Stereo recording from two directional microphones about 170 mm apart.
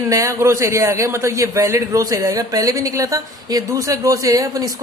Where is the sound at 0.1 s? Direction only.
15° right (ahead or behind).